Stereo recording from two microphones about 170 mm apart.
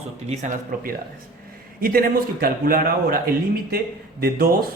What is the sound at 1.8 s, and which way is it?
A man's voice, 60° right (ahead or behind).